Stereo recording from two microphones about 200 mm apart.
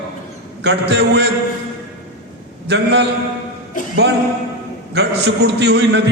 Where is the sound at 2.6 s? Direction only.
60° right (ahead or behind).